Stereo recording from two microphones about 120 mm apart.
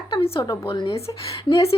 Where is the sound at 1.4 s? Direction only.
50° left (ahead or behind).